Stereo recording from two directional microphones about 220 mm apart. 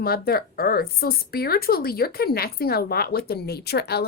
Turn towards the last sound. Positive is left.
turn(degrees=45)  # may be behind; listen again after turning